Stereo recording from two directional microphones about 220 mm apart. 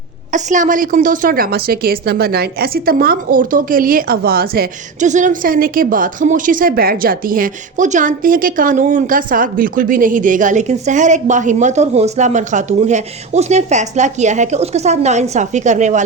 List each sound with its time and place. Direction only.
0.3 s a woman's voice: 35° right (ahead or behind)